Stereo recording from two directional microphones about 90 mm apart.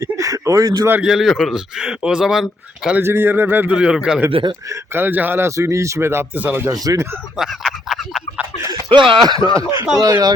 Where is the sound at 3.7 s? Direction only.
10° right (ahead or behind).